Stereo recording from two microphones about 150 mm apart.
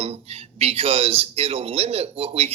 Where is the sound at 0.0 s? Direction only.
45° right (ahead or behind).